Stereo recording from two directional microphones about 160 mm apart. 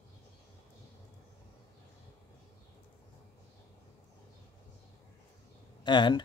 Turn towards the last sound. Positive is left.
turn(degrees=30)  # may be behind; listen again after turning